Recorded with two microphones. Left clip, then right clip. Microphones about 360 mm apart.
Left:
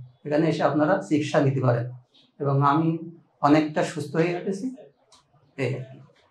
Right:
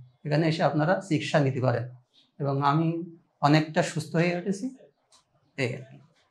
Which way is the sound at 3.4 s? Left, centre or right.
Right.